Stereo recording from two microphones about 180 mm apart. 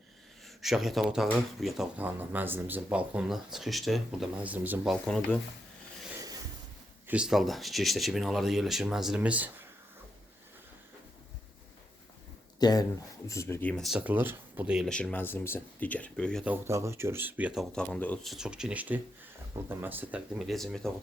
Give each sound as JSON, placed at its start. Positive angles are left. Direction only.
{"t": 0.4, "sound": "speech", "side_deg": 0}
{"t": 7.1, "sound": "speech", "side_deg": -5}
{"t": 12.5, "sound": "speech", "side_deg": 20}
{"t": 16.4, "sound": "speech", "side_deg": -10}